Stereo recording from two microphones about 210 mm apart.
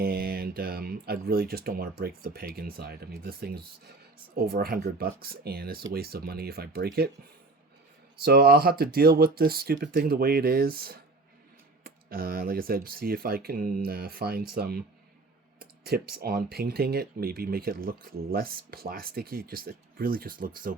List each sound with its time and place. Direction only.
0.0 s speech: 45° right (ahead or behind)
8.2 s speech: 45° right (ahead or behind)